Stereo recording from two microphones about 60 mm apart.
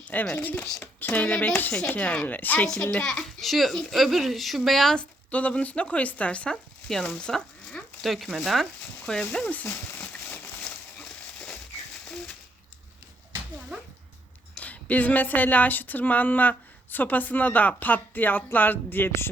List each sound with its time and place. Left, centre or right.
0.0 s a child's voice: left
2.2 s speech: left
2.8 s a child's voice: centre
3.4 s speech: centre
4.9 s speech: left
8.0 s a child's voice: centre
9.6 s speech: left
10.0 s crumpling: left
14.6 s speech: left